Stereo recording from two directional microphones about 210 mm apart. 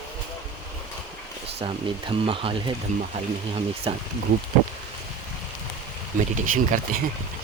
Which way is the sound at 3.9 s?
25° right (ahead or behind).